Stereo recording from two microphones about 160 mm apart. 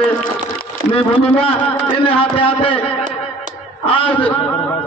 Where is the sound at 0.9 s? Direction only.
35° left (ahead or behind).